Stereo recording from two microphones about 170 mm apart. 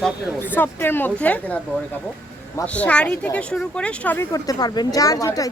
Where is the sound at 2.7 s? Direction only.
5° left (ahead or behind).